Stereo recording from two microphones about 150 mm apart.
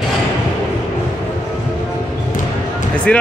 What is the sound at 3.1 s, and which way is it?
Speech, 10° left (ahead or behind).